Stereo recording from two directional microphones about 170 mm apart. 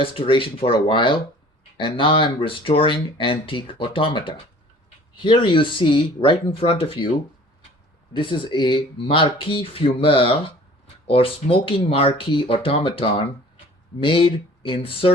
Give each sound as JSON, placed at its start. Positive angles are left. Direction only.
{"t": 0.0, "sound": "speech", "side_deg": 30}
{"t": 8.1, "sound": "speech", "side_deg": 30}